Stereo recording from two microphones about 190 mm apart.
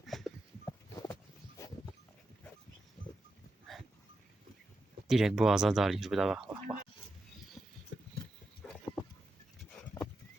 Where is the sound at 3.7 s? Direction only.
Centre (ahead or behind).